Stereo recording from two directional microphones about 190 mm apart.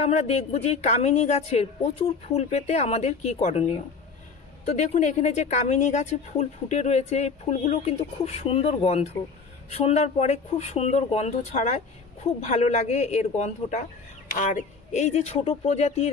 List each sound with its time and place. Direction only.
0.0 s speech: 35° left (ahead or behind)
4.6 s speech: 40° left (ahead or behind)